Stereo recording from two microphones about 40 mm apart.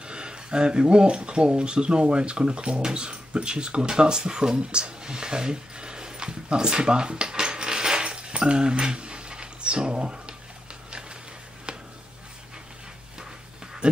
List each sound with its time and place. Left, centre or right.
0.0 s speech: right